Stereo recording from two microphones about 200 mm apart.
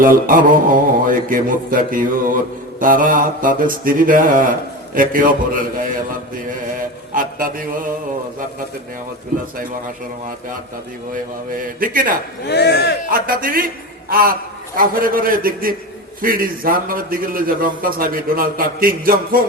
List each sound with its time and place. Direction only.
0.0 s a man's voice: 45° right (ahead or behind)
11.8 s a man's voice: 45° right (ahead or behind)
12.5 s speech: 55° left (ahead or behind)
13.1 s a man's voice: 45° right (ahead or behind)